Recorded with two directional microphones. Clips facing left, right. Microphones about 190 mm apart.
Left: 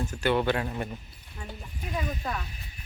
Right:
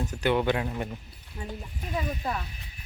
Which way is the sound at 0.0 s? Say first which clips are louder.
Even; 20° right (ahead or behind).